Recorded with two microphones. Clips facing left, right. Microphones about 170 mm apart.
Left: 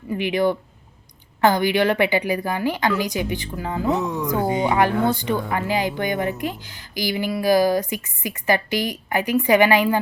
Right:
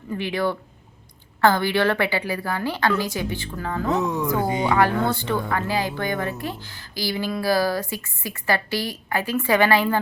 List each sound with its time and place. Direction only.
0.1 s a woman's voice: 15° left (ahead or behind)